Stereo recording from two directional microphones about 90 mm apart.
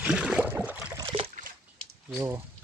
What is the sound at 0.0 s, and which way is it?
Boat, 10° right (ahead or behind).